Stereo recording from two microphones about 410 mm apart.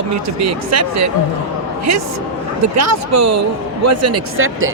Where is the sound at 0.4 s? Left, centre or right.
Right.